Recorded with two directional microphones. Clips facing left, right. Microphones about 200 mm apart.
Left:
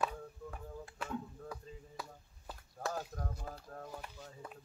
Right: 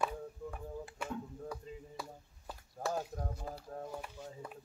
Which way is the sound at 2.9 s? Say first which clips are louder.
Right 3 dB; 15° right (ahead or behind).